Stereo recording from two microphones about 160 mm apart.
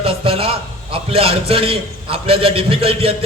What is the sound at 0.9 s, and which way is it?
A man's voice, 35° right (ahead or behind).